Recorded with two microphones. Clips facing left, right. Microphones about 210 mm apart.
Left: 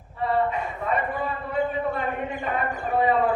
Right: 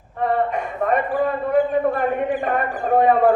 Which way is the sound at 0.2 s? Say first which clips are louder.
Right 3 dB; 55° right (ahead or behind).